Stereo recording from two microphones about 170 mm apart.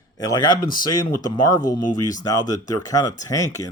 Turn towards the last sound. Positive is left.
turn(degrees=20)  # may be behind; listen again after turning